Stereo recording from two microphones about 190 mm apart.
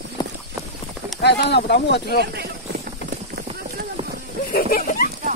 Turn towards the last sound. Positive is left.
turn(degrees=50)  # may be behind; listen again after turning